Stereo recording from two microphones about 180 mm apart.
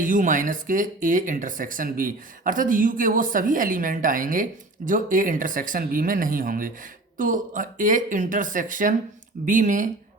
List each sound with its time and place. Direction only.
0.0 s speech: 45° right (ahead or behind)